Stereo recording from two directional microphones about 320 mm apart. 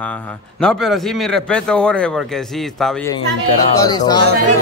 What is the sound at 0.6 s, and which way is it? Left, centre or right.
Speech, centre.